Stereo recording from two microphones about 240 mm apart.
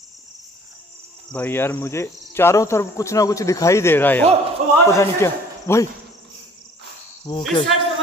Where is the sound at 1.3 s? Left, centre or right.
Centre.